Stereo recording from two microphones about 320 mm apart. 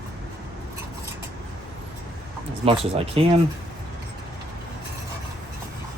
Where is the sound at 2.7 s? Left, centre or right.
Centre.